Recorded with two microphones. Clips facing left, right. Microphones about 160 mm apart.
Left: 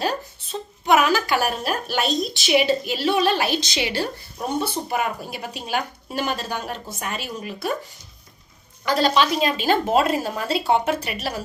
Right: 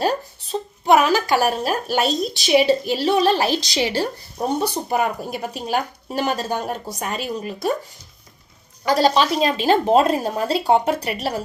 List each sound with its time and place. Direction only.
0.9 s a sound: 35° right (ahead or behind)
1.3 s a woman's voice: 35° right (ahead or behind)
8.8 s a woman's voice: 35° right (ahead or behind)